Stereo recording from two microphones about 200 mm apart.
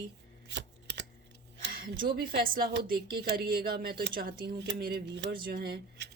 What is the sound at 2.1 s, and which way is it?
A woman's voice, 45° right (ahead or behind).